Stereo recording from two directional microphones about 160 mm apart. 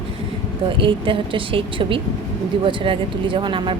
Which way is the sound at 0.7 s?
30° right (ahead or behind).